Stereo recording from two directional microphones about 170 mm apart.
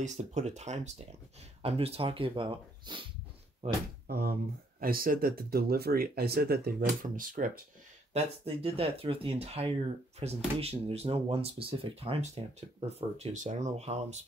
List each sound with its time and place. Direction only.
0.0 s speech: 45° right (ahead or behind)
4.1 s speech: 65° right (ahead or behind)
8.1 s speech: 35° right (ahead or behind)